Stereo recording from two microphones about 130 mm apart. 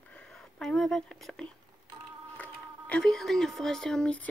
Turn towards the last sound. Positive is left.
turn(degrees=10)  # may be behind; listen again after turning